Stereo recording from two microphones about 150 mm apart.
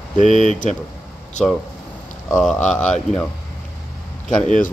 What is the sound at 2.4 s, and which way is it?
Speech, 5° left (ahead or behind).